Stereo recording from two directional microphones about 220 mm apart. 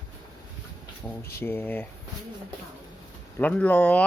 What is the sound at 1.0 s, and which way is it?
Speech, 10° left (ahead or behind).